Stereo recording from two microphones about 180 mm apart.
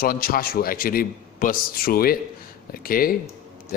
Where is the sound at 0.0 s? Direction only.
55° left (ahead or behind).